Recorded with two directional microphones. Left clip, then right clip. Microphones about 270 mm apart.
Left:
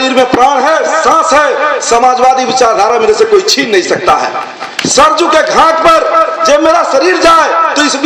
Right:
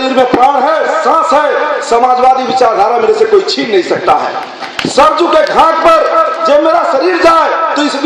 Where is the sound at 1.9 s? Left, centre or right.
Left.